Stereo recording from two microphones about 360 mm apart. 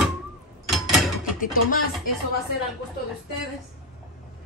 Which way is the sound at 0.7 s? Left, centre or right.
Centre.